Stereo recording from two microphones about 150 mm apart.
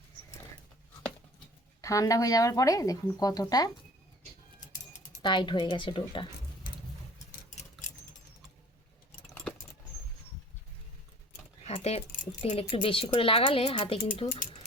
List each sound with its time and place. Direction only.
1.8 s a woman's voice: 20° left (ahead or behind)
5.2 s speech: 30° left (ahead or behind)
7.3 s a sound: 50° left (ahead or behind)
9.3 s keys jangling: 10° left (ahead or behind)
11.6 s speech: 45° left (ahead or behind)
12.7 s speech: 35° left (ahead or behind)